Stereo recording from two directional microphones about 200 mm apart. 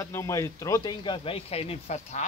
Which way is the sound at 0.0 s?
15° left (ahead or behind).